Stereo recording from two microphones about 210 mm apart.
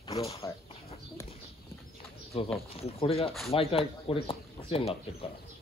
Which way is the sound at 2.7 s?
25° left (ahead or behind).